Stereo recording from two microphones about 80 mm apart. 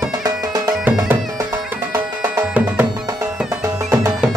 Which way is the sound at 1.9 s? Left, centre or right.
Right.